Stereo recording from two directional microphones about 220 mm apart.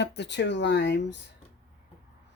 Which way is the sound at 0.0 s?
50° left (ahead or behind).